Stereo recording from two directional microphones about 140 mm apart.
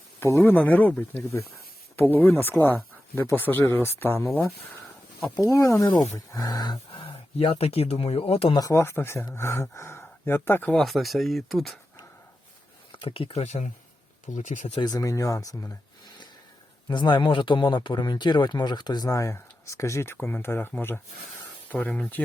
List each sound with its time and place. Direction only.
0.2 s a man's voice: 20° left (ahead or behind)
5.4 s speech: 25° left (ahead or behind); by 8.5 s 45° left (ahead or behind)
8.5 s a man's voice: 25° left (ahead or behind)
10.8 s speech: centre (ahead or behind)
12.9 s speech: 40° left (ahead or behind); by 14.8 s 60° left (ahead or behind)
14.8 s a man's voice: 25° left (ahead or behind); by 22.2 s 10° left (ahead or behind)